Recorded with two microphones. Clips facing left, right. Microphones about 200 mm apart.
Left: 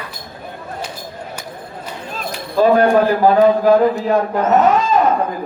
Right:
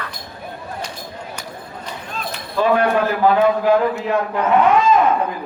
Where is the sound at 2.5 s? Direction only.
35° left (ahead or behind).